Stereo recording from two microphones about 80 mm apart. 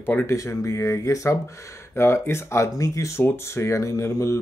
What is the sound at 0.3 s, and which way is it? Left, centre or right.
Speech, left.